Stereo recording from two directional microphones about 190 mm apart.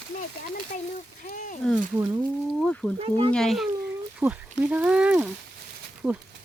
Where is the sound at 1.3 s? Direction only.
45° left (ahead or behind).